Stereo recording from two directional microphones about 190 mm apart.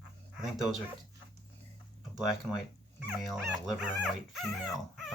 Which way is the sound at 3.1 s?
Centre (ahead or behind).